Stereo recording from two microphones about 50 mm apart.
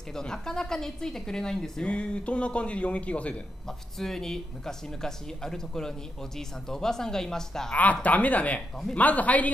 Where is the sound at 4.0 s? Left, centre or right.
Centre.